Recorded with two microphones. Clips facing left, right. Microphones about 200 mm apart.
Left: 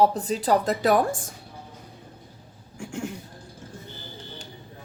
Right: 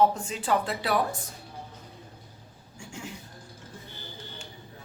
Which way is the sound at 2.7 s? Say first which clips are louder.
Left 9 dB; 55° left (ahead or behind).